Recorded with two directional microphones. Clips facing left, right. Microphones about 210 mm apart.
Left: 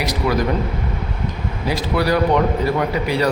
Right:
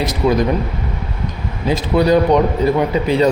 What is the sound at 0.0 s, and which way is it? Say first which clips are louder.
Speech: right 4 dB; 25° right (ahead or behind).